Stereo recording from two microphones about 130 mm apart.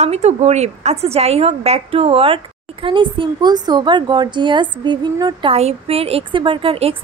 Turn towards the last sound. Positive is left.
turn(degrees=-45)  # may be behind; listen again after turning